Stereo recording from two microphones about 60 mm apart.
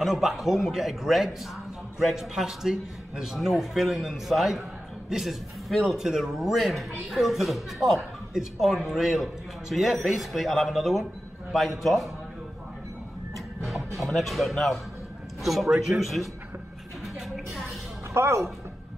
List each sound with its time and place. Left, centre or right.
0.0 s a man's voice: centre
13.7 s a man's voice: centre
18.1 s speech: right